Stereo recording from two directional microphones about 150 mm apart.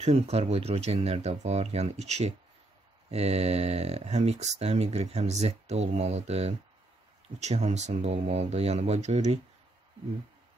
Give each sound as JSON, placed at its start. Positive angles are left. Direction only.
{"t": 0.0, "sound": "speech", "side_deg": -45}